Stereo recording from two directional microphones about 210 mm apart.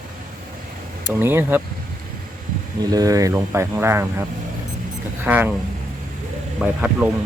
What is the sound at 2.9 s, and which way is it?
Speech, 15° right (ahead or behind).